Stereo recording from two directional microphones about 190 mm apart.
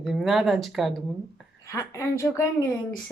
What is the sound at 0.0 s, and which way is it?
Speech, centre (ahead or behind).